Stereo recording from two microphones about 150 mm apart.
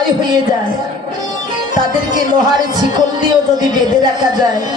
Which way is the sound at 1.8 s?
25° right (ahead or behind).